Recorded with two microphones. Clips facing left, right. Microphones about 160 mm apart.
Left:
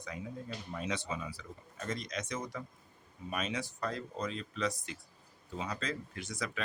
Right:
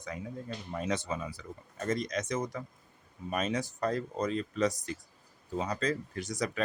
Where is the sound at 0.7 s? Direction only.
45° right (ahead or behind).